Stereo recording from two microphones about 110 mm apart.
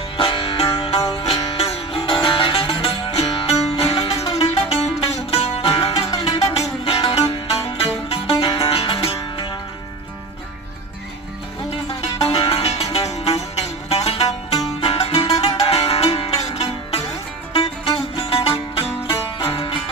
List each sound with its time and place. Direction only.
0.2 s music: 55° left (ahead or behind)
6.1 s music: 45° left (ahead or behind)
6.5 s music: 65° left (ahead or behind)
11.9 s music: 60° left (ahead or behind)
14.8 s music: 55° left (ahead or behind)